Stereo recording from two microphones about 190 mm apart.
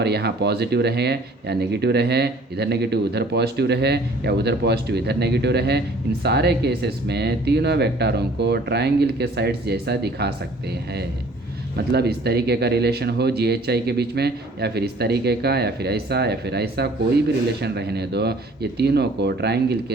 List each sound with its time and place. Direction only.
0.0 s speech: 60° right (ahead or behind)
11.9 s speech: 60° right (ahead or behind)